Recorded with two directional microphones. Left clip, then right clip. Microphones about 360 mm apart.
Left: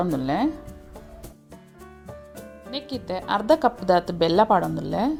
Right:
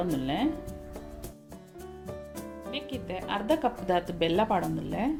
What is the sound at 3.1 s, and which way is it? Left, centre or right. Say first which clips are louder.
Speech: left 8 dB; left.